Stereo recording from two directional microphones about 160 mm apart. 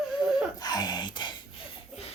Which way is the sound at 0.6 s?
25° left (ahead or behind).